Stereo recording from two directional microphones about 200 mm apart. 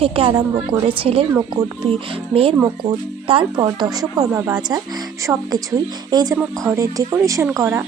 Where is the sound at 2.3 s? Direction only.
25° right (ahead or behind).